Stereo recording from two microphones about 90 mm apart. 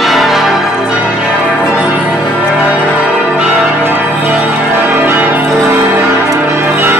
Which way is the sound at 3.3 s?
10° right (ahead or behind).